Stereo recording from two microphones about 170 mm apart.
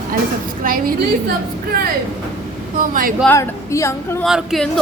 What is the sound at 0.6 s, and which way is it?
Speech, 55° right (ahead or behind).